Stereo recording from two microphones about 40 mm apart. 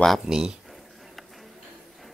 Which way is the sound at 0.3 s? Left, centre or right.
Centre.